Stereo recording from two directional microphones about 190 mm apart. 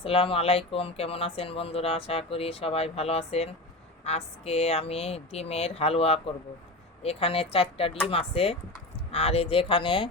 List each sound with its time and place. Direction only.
0.0 s speech: 30° left (ahead or behind)